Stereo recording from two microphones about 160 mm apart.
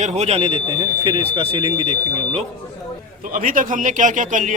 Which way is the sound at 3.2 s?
60° right (ahead or behind).